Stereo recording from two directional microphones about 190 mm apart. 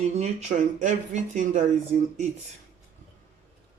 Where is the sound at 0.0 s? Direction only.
35° right (ahead or behind).